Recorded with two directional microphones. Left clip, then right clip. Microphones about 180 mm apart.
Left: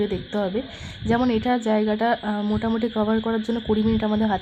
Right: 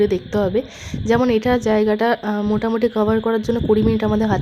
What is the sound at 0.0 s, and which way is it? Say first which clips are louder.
Speech: right 7 dB; 25° right (ahead or behind).